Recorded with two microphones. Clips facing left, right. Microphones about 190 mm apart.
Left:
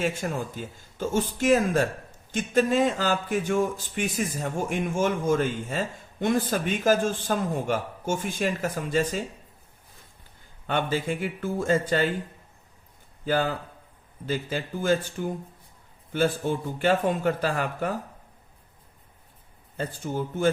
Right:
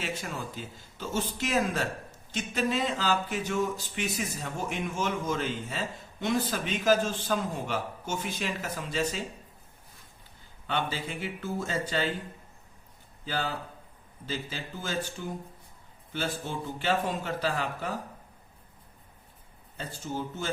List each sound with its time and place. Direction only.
0.0 s speech: 50° left (ahead or behind)
10.7 s speech: 50° left (ahead or behind)
13.2 s speech: 50° left (ahead or behind)
19.7 s speech: 50° left (ahead or behind)